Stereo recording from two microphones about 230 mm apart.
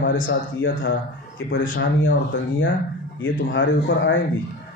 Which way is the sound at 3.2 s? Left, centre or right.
Left.